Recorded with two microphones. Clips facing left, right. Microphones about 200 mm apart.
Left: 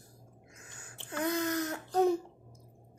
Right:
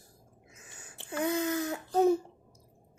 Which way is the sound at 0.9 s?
10° right (ahead or behind).